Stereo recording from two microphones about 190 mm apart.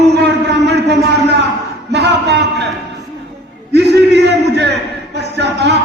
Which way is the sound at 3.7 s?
60° right (ahead or behind).